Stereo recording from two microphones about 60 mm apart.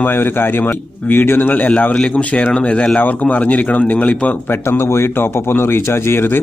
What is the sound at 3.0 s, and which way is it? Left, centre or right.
Speech, left.